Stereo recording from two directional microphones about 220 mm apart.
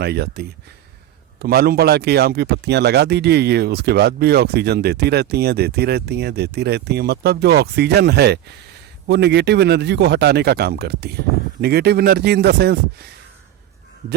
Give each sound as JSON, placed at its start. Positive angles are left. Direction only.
{"t": 0.0, "sound": "speech", "side_deg": -50}